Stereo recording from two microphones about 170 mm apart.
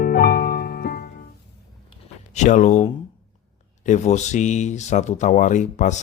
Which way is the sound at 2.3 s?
45° left (ahead or behind).